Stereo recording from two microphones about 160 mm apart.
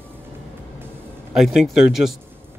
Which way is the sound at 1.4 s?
5° right (ahead or behind).